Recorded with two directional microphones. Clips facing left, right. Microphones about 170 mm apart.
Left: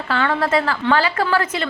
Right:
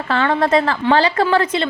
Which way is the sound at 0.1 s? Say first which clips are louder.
Right 3 dB; 35° right (ahead or behind).